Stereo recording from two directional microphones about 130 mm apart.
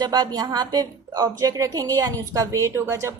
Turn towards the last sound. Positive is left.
turn(degrees=-20)  # may be behind; listen again after turning